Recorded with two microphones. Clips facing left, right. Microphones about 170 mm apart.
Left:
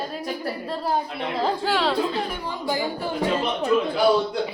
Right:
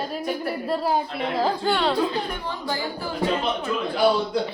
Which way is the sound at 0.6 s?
5° right (ahead or behind).